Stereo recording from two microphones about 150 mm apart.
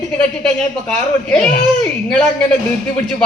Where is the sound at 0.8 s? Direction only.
5° left (ahead or behind).